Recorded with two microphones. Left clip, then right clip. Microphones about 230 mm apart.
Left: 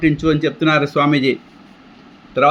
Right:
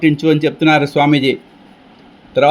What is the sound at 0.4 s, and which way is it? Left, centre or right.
A man's voice, right.